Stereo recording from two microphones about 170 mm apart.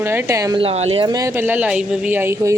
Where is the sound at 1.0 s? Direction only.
20° right (ahead or behind).